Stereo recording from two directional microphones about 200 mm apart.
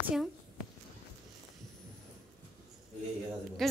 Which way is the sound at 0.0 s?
Centre (ahead or behind).